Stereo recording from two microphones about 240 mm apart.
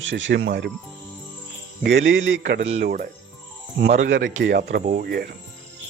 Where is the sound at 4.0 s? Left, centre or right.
Right.